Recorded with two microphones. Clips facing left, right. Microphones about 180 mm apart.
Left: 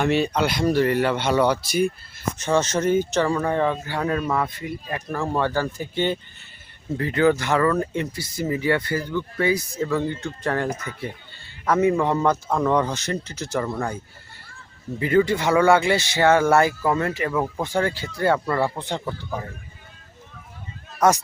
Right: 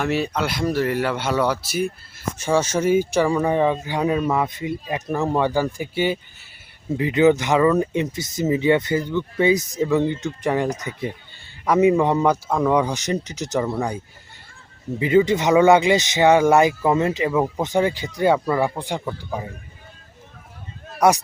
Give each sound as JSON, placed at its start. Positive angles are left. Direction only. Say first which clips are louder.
{"t": 0.0, "sound": "speech", "louder": "left 2 dB", "side_deg": -5}
{"t": 13.7, "sound": "speech", "louder": "right 3 dB", "side_deg": -5}
{"t": 14.9, "sound": "speech", "louder": "right 2 dB", "side_deg": -20}
{"t": 21.0, "sound": "speech", "louder": "right 2 dB", "side_deg": -15}